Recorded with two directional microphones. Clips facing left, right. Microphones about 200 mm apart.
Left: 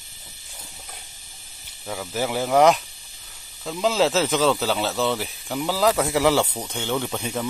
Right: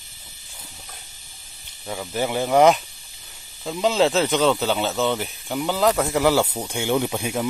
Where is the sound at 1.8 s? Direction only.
5° right (ahead or behind).